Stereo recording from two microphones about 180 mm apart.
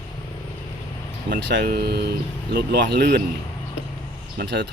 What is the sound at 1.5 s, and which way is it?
Speech, 60° right (ahead or behind).